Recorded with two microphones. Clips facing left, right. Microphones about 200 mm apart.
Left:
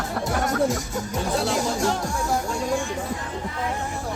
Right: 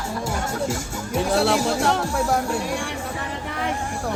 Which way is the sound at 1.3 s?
75° right (ahead or behind).